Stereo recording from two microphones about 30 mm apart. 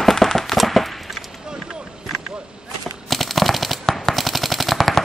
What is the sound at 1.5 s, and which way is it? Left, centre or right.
Run, right.